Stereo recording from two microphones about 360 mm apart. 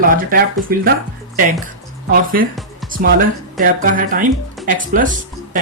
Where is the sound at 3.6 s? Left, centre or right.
Right.